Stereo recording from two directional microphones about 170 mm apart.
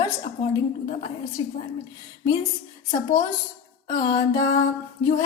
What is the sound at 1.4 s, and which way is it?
Speech, 25° left (ahead or behind).